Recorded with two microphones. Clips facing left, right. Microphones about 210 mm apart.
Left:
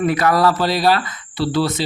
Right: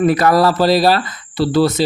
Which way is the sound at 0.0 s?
35° right (ahead or behind).